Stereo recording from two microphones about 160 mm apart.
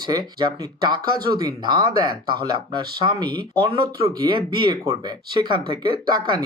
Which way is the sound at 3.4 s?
30° right (ahead or behind).